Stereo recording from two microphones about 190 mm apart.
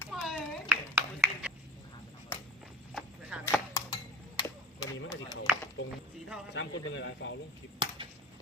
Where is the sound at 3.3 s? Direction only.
5° right (ahead or behind).